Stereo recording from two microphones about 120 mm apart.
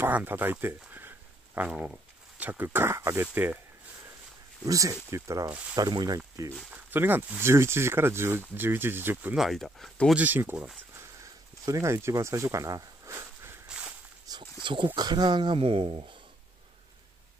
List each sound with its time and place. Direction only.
0.0 s speech: 15° right (ahead or behind)
4.6 s speech: 30° right (ahead or behind)
6.7 s speech: 15° right (ahead or behind)
9.4 s speech: centre (ahead or behind)
10.1 s speech: 15° right (ahead or behind)
13.7 s walk: 10° right (ahead or behind)
14.4 s a sound: 45° right (ahead or behind)
15.0 s speech: 35° right (ahead or behind)